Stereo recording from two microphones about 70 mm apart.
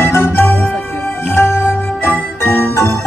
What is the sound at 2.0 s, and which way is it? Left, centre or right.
Music, left.